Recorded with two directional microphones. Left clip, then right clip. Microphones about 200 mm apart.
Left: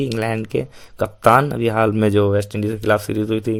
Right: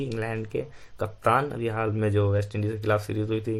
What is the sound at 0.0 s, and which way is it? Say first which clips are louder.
Speech: left 9 dB; 40° left (ahead or behind).